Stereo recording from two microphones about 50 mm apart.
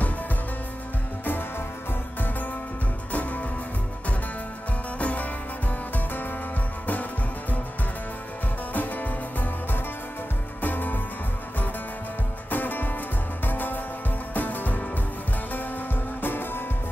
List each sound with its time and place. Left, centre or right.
3.1 s music: left
4.9 s music: left
8.7 s music: left
12.4 s music: left
16.2 s music: left